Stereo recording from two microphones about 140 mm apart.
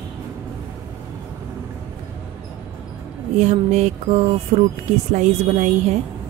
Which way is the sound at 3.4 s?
55° right (ahead or behind).